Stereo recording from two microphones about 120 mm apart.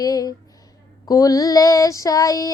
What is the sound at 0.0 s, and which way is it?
Speech, 30° left (ahead or behind).